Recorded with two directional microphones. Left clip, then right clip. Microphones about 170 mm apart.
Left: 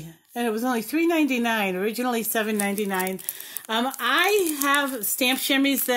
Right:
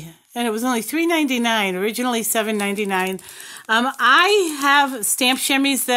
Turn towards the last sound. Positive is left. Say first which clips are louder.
# right 4 dB
turn(degrees=-35)  # may be behind; listen again after turning